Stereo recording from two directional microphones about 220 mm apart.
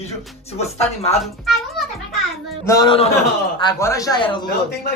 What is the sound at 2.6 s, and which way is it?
Speech, 20° left (ahead or behind).